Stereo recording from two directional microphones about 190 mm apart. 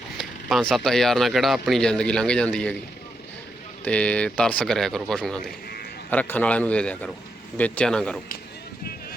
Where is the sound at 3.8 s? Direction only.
5° left (ahead or behind).